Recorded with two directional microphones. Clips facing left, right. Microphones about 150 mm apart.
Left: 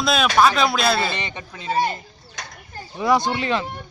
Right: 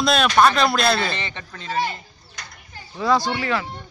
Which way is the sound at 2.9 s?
20° left (ahead or behind).